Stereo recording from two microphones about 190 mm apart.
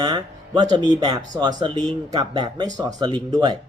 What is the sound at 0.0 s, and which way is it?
Speech, 20° right (ahead or behind).